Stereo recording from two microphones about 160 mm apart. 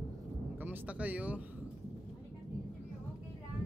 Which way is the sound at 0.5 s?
10° right (ahead or behind).